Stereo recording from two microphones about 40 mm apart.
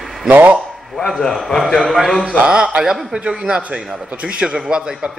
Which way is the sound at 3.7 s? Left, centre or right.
Right.